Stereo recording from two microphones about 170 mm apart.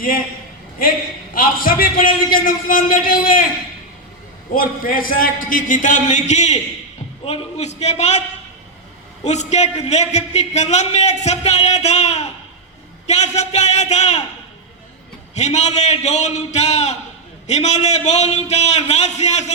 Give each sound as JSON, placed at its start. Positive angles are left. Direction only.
{"t": 0.8, "sound": "a man's voice", "side_deg": 55}
{"t": 4.5, "sound": "a man's voice", "side_deg": 55}
{"t": 9.2, "sound": "speech", "side_deg": 40}
{"t": 15.4, "sound": "speech", "side_deg": 40}